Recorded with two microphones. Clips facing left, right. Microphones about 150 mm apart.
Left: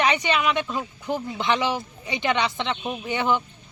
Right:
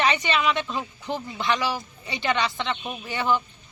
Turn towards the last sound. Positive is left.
turn(degrees=20)  # may be behind; listen again after turning